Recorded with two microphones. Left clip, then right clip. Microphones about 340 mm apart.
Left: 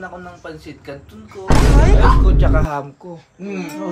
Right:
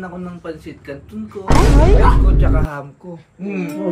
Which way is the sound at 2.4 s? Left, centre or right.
Left.